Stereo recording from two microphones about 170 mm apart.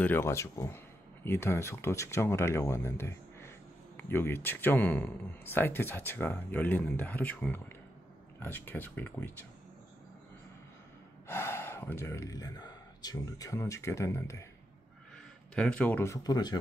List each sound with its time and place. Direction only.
0.0 s speech: 15° left (ahead or behind)
11.2 s speech: 15° left (ahead or behind)
15.5 s speech: 5° left (ahead or behind); by 16.5 s 25° left (ahead or behind)